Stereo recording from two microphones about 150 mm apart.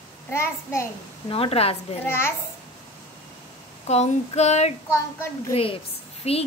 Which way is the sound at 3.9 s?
45° left (ahead or behind).